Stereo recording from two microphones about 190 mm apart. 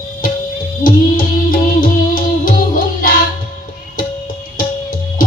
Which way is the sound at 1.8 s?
45° left (ahead or behind).